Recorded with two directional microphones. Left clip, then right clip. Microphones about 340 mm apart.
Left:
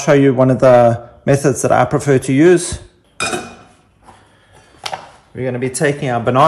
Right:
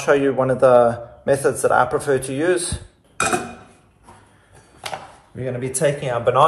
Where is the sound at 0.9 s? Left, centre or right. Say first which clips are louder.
Left 4 dB; left.